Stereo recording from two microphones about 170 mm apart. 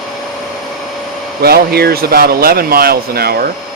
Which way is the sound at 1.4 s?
65° right (ahead or behind).